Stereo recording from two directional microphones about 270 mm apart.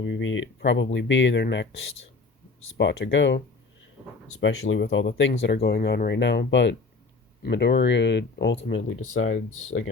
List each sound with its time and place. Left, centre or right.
0.0 s speech: left
2.7 s speech: left